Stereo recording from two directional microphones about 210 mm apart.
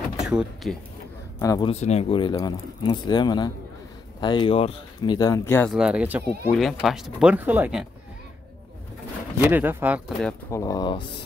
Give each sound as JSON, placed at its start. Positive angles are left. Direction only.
{"t": 0.2, "sound": "speech", "side_deg": -5}
{"t": 1.4, "sound": "speech", "side_deg": 15}
{"t": 1.7, "sound": "speech", "side_deg": 30}
{"t": 5.7, "sound": "speech", "side_deg": -5}
{"t": 9.4, "sound": "speech", "side_deg": -10}
{"t": 10.5, "sound": "speech", "side_deg": 15}